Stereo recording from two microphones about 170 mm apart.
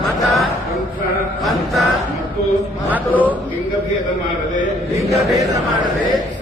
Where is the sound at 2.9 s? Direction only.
10° right (ahead or behind).